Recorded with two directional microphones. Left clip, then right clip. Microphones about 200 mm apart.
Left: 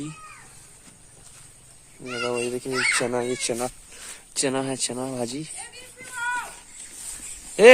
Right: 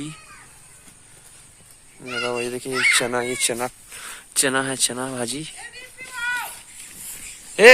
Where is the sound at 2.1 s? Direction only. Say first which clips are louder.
Right 2 dB; 10° right (ahead or behind).